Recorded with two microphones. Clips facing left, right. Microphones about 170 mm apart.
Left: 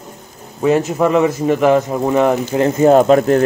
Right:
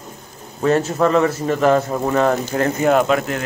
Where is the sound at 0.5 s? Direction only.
10° left (ahead or behind).